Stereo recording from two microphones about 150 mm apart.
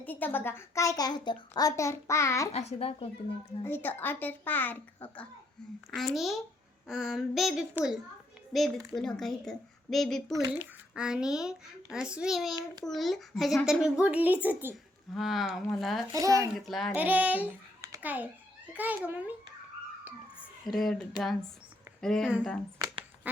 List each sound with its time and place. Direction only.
0.0 s a woman's voice: 10° left (ahead or behind)
2.5 s a child's voice: 45° left (ahead or behind)
3.6 s a child's voice: 15° left (ahead or behind)
5.9 s a woman's voice: centre (ahead or behind)
15.1 s speech: centre (ahead or behind)
16.1 s speech: 20° right (ahead or behind)
16.6 s speech: centre (ahead or behind)
16.9 s a child's voice: 10° right (ahead or behind)
20.7 s speech: centre (ahead or behind)
23.3 s duck: 10° right (ahead or behind)